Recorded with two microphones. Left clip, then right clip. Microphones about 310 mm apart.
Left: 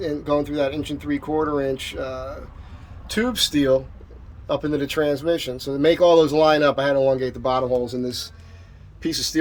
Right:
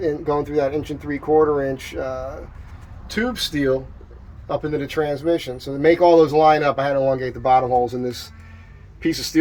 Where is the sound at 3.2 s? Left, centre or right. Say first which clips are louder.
Left 2 dB; centre.